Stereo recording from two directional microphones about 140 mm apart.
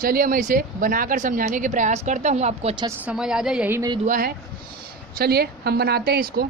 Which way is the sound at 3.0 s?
5° right (ahead or behind).